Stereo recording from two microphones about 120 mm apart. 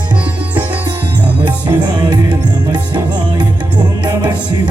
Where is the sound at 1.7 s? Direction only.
35° right (ahead or behind).